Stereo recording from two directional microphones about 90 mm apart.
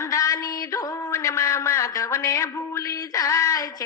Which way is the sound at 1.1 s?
30° left (ahead or behind).